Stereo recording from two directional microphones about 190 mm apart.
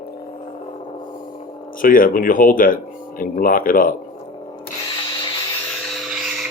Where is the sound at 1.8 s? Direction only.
45° left (ahead or behind).